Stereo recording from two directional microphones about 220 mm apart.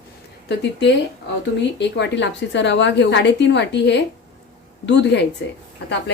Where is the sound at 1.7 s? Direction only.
50° left (ahead or behind).